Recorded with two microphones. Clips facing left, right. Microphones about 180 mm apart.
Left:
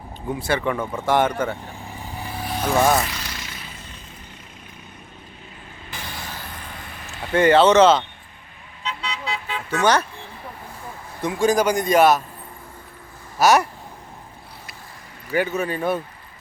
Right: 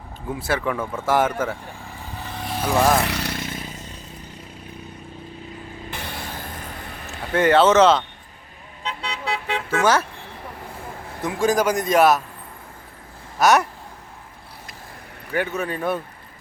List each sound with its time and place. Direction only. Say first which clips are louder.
0.3 s a man's voice: left 1 dB; centre (ahead or behind)
1.8 s vehicle: left 2 dB; 15° left (ahead or behind); by 3.0 s centre (ahead or behind)
3.0 s a sound: right 5 dB; 65° right (ahead or behind); by 3.9 s 45° right (ahead or behind)
5.9 s vehicle: right 1 dB; 60° right (ahead or behind)
7.3 s a man's voice: left 1 dB; centre (ahead or behind)
8.8 s vehicle: even; 55° right (ahead or behind); by 9.6 s 70° right (ahead or behind)
9.8 s a man's voice: left 1 dB; 5° right (ahead or behind)
11.2 s a man's voice: left 1 dB; centre (ahead or behind)
13.4 s a man's voice: left 1 dB; centre (ahead or behind)
15.3 s a man's voice: left 2 dB; centre (ahead or behind)